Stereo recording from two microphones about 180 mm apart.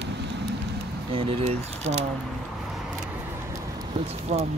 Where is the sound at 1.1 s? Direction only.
35° right (ahead or behind).